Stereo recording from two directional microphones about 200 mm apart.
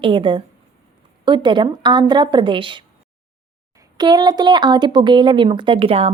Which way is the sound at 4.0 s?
20° right (ahead or behind).